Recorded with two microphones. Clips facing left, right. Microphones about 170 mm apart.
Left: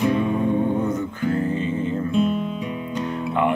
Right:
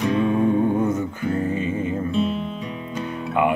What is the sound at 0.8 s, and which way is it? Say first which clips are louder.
Music: even; 20° right (ahead or behind).